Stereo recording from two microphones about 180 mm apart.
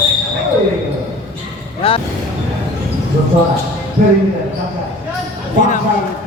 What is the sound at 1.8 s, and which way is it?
Music, 30° left (ahead or behind).